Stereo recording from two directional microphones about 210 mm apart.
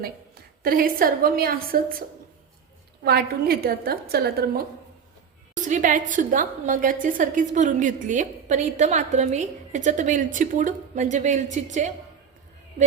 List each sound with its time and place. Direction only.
0.6 s a woman's voice: 45° right (ahead or behind)
5.5 s a woman's voice: 35° right (ahead or behind)